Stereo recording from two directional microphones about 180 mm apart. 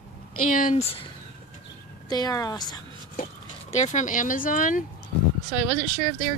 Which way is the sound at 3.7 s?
40° left (ahead or behind).